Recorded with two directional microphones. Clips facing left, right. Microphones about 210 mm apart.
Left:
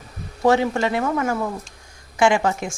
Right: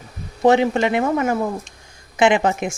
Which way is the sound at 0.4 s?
20° right (ahead or behind).